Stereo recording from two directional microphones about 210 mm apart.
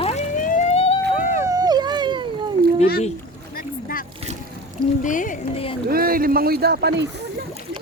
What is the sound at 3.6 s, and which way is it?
Boat, 45° left (ahead or behind).